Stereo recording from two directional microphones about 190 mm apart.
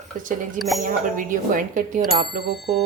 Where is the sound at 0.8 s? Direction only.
45° right (ahead or behind).